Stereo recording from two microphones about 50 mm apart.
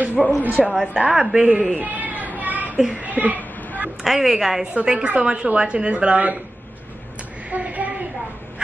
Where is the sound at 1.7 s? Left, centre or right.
Right.